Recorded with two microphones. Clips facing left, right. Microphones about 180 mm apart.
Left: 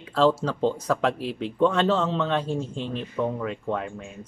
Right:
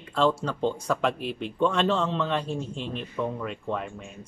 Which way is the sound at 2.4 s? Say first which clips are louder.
Left 3 dB; 30° left (ahead or behind).